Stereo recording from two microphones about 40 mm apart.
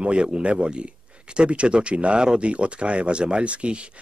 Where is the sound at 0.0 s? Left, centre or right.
Right.